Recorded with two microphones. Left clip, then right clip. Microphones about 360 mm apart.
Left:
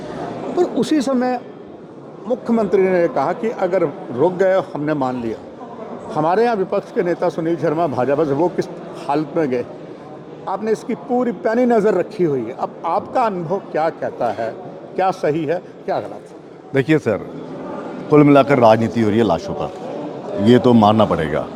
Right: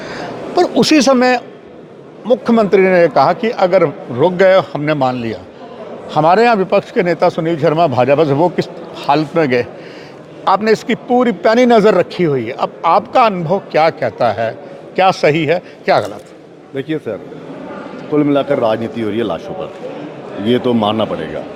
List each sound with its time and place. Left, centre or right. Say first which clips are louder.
0.5 s a man's voice: right 7 dB; right
16.7 s a man's voice: left 4 dB; left